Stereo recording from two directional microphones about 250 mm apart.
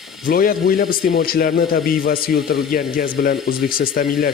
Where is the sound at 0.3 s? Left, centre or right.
Left.